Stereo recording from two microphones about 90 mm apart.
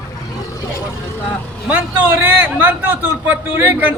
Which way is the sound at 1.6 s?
20° right (ahead or behind).